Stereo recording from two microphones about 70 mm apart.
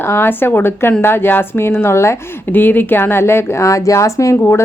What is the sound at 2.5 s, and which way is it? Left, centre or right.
A woman's voice, left.